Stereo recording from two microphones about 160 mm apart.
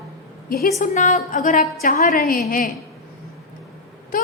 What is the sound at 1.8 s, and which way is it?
Speech, 65° left (ahead or behind).